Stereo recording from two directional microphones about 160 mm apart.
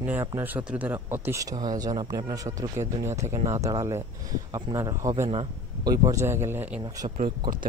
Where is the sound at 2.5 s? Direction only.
20° right (ahead or behind).